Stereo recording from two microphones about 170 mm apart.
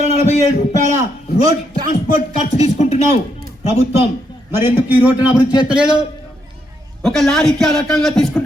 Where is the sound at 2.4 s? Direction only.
40° left (ahead or behind).